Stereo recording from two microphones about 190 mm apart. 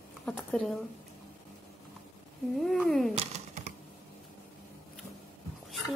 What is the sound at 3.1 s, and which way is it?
Computer keyboard, 35° right (ahead or behind).